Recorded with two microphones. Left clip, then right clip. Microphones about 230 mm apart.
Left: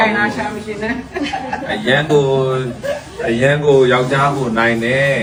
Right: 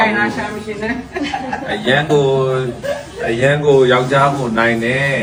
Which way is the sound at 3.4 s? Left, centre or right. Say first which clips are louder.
Even; centre.